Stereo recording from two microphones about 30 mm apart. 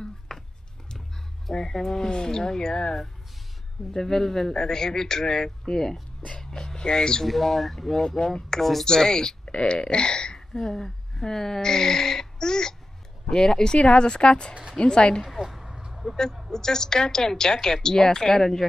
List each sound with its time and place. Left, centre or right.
0.3 s a sound: left
1.5 s a woman's voice: centre
3.9 s speech: centre
6.4 s a sound: left
7.2 s speech: centre
8.2 s a woman's voice: left
8.5 s speech: centre
8.8 s a woman's voice: left
9.5 s a woman's voice: left
13.7 s speech: left
15.7 s vehicle: right
16.4 s a woman's voice: centre